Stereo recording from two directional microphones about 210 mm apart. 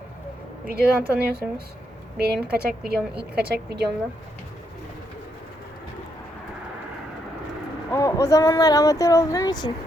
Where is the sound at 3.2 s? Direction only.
50° right (ahead or behind).